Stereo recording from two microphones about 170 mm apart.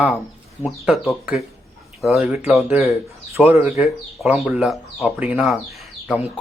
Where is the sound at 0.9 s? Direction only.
5° right (ahead or behind).